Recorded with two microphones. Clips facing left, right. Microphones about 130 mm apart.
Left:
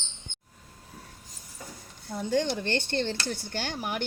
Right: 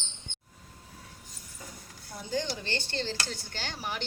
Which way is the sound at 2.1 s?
60° left (ahead or behind).